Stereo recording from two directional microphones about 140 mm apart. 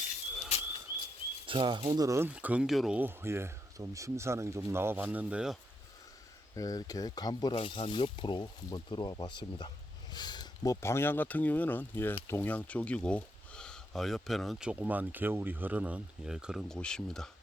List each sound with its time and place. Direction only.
1.5 s speech: 35° right (ahead or behind)
2.0 s speech: 20° right (ahead or behind); by 3.0 s centre (ahead or behind)
3.0 s speech: 15° right (ahead or behind)
6.6 s speech: 25° left (ahead or behind); by 17.2 s 5° left (ahead or behind)